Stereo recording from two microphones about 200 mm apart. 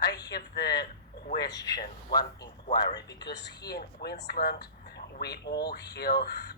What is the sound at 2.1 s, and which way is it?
A man's voice, 20° left (ahead or behind).